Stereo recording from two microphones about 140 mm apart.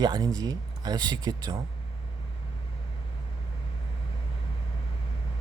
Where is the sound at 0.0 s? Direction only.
30° right (ahead or behind).